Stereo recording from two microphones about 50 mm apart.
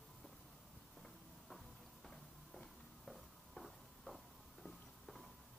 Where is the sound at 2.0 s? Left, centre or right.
Centre.